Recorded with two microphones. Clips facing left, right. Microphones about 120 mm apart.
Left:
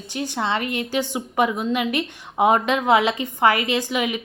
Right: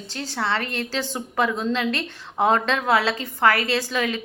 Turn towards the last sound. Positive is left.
turn(degrees=15)  # may be behind; listen again after turning